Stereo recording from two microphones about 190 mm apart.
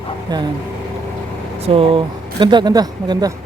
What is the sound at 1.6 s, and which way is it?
Speech, 30° right (ahead or behind).